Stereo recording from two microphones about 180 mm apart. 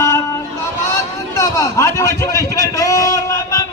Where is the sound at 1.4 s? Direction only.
15° left (ahead or behind).